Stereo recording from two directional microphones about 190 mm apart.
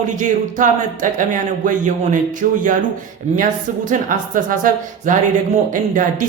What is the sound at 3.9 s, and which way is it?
Speech, 45° right (ahead or behind).